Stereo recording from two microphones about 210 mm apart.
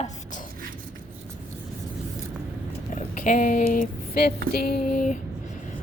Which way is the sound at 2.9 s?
40° left (ahead or behind).